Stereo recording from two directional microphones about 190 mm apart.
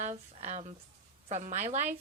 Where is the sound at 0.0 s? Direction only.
35° right (ahead or behind).